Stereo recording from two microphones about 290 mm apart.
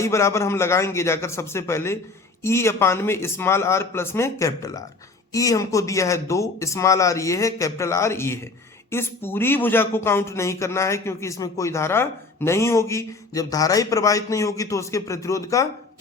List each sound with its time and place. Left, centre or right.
0.0 s a man's voice: centre